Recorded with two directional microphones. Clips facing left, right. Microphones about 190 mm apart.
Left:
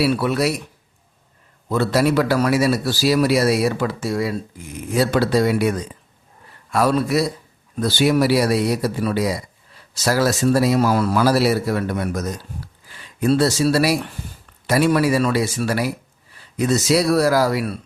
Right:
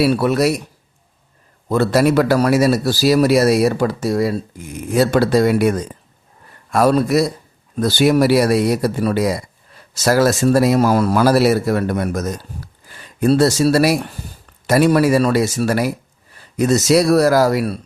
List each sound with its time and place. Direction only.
0.0 s speech: 45° right (ahead or behind)
1.7 s a man's voice: 50° right (ahead or behind)